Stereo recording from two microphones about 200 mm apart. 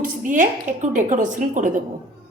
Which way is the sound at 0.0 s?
40° right (ahead or behind).